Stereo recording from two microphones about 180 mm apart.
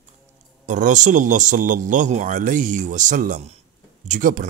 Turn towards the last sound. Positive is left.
turn(degrees=-45)  # may be behind; listen again after turning